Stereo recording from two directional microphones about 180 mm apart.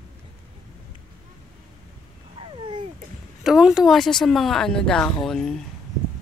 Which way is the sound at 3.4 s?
Centre (ahead or behind).